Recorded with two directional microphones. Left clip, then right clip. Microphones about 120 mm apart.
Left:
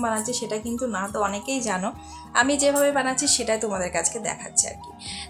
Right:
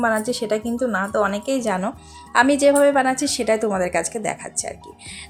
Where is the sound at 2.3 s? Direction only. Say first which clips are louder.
Right 5 dB; 45° right (ahead or behind).